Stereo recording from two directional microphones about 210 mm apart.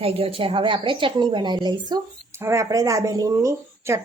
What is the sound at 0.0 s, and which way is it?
A woman's voice, 25° right (ahead or behind).